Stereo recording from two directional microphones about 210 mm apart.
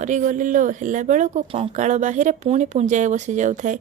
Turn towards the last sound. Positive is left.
turn(degrees=-35)  # may be behind; listen again after turning